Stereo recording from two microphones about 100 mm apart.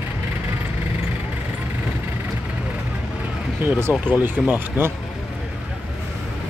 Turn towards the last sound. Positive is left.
turn(degrees=-20)  # may be behind; listen again after turning